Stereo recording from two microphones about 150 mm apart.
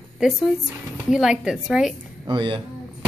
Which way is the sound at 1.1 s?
5° right (ahead or behind).